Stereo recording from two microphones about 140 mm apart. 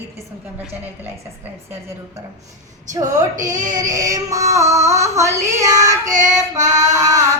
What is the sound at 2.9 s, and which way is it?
A woman's voice, 25° right (ahead or behind).